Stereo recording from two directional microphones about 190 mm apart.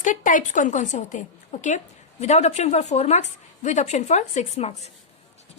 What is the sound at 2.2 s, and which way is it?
Speech, 35° left (ahead or behind).